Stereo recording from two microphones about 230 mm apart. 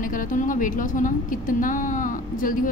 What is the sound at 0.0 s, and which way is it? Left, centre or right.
A woman's voice, left.